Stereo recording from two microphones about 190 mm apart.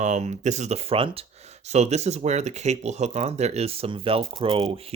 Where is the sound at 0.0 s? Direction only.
40° right (ahead or behind).